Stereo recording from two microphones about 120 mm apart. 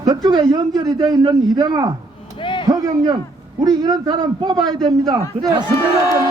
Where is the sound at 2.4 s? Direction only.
45° left (ahead or behind).